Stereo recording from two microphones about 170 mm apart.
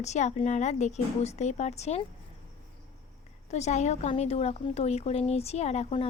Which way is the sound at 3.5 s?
40° left (ahead or behind).